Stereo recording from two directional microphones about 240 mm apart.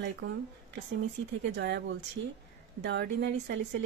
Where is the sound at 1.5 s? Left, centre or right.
Right.